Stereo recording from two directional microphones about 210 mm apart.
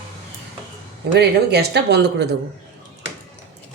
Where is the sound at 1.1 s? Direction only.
50° right (ahead or behind).